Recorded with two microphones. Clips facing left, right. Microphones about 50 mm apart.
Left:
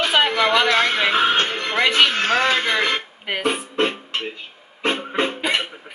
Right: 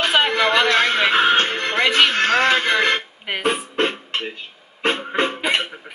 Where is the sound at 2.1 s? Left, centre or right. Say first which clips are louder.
Right 2 dB; right.